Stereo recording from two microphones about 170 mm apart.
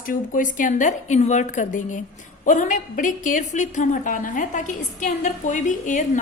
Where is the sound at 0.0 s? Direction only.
50° left (ahead or behind).